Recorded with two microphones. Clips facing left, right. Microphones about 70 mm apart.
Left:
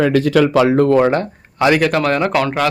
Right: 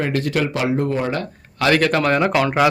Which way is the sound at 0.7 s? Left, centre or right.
Left.